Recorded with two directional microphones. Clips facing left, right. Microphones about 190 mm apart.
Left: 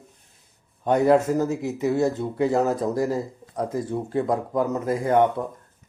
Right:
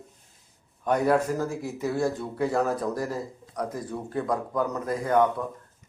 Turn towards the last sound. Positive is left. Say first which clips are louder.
# left 3 dB
turn(degrees=25)  # may be behind; listen again after turning